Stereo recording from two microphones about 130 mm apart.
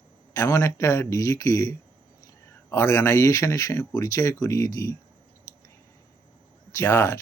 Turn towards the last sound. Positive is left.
turn(degrees=20)  # may be behind; listen again after turning